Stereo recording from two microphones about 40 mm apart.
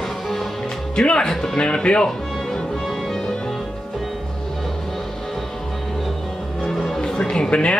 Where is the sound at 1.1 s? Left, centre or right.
Centre.